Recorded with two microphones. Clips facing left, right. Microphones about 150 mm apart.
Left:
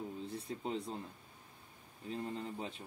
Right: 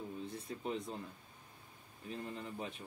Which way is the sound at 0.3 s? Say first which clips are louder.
Left 1 dB; 30° left (ahead or behind).